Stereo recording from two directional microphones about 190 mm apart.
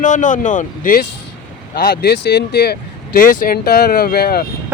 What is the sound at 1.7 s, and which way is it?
Speech, 55° left (ahead or behind).